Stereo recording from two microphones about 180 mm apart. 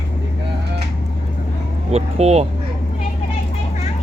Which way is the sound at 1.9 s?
35° right (ahead or behind).